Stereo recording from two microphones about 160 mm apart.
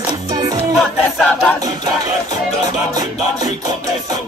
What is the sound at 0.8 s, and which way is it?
Music, centre (ahead or behind).